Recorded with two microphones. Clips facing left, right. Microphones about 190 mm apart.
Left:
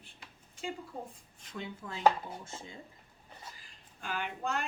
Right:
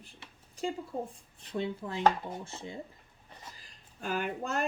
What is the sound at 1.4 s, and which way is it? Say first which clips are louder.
Speech: right 8 dB; 30° right (ahead or behind).